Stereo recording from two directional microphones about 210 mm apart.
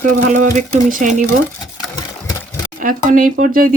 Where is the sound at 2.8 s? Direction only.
40° right (ahead or behind).